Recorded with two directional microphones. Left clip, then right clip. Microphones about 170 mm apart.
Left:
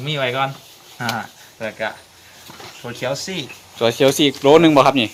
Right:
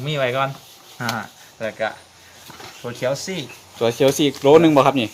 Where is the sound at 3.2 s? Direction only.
30° right (ahead or behind).